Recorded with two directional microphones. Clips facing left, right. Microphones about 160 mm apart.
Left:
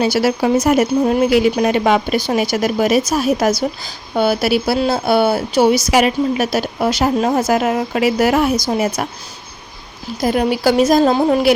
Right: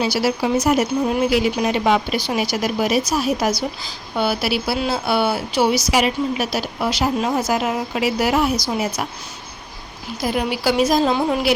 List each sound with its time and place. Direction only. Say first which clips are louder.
0.0 s speech: left 4 dB; 50° left (ahead or behind)
10.2 s speech: left 6 dB; 45° left (ahead or behind)